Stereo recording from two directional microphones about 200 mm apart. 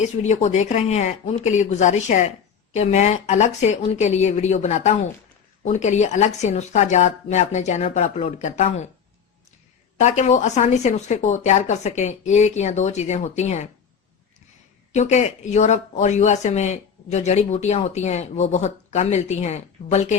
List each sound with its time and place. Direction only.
0.0 s speech: 35° left (ahead or behind)
10.0 s speech: 35° left (ahead or behind)
14.9 s speech: 35° left (ahead or behind)